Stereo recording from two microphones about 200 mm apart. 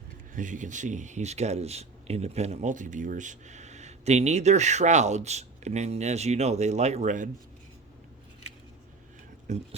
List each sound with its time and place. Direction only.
0.3 s speech: 40° right (ahead or behind)
9.5 s speech: 35° right (ahead or behind)